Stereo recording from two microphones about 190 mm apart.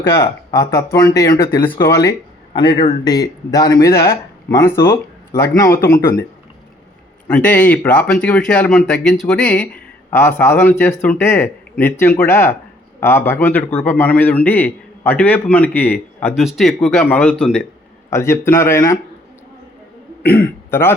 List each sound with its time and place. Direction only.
0.0 s a man's voice: 15° left (ahead or behind)
7.3 s a man's voice: 5° left (ahead or behind)
16.3 s a man's voice: centre (ahead or behind); by 18.8 s 15° left (ahead or behind)
20.7 s speech: 10° left (ahead or behind)